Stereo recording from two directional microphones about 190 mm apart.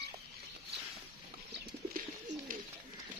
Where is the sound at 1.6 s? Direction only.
50° right (ahead or behind).